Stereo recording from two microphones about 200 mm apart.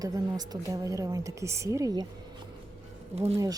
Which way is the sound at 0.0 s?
20° right (ahead or behind).